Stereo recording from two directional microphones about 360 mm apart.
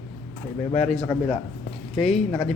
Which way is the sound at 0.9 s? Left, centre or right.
Centre.